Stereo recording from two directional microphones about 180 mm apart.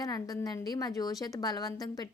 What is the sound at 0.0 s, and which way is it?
Speech, 20° left (ahead or behind).